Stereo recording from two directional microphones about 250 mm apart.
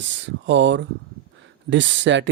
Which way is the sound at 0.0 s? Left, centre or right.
Right.